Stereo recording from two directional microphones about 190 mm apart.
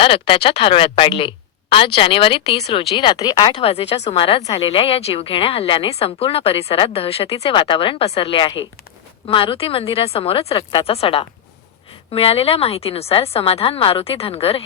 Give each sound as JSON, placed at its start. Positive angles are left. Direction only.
{"t": 0.0, "sound": "a woman's voice", "side_deg": 30}